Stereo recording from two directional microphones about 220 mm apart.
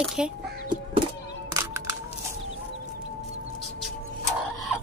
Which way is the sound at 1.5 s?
15° right (ahead or behind).